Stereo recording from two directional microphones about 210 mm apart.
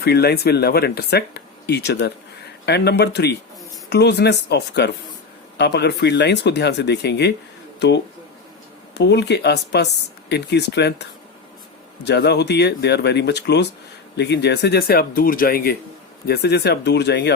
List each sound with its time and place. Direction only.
0.0 s speech: 50° left (ahead or behind)
12.0 s speech: 55° left (ahead or behind)